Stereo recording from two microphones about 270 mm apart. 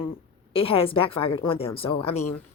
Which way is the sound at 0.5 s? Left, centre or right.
Left.